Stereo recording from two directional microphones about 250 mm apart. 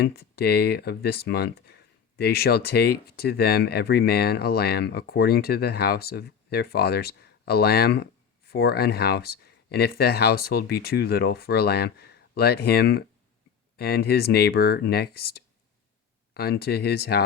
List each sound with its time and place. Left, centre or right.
0.0 s speech: left